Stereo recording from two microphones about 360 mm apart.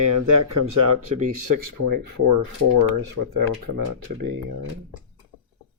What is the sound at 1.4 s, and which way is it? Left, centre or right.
Speech, right.